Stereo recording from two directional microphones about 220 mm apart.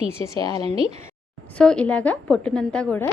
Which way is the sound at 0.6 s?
25° right (ahead or behind).